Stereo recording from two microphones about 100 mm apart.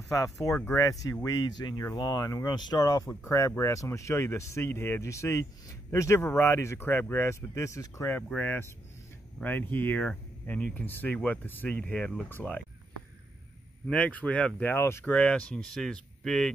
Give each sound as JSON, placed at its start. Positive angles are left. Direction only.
{"t": 0.1, "sound": "speech", "side_deg": 35}
{"t": 13.8, "sound": "speech", "side_deg": 15}
{"t": 15.1, "sound": "speech", "side_deg": 10}